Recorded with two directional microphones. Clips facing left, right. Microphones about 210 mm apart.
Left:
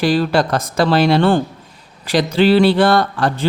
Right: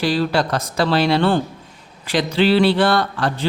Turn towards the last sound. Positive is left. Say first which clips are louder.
# left 3 dB
turn(degrees=45)  # may be behind; listen again after turning